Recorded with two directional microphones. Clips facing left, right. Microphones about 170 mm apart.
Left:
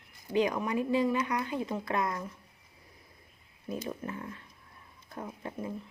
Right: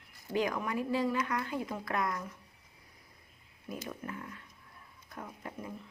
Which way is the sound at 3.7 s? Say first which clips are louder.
Left 4 dB; 25° left (ahead or behind).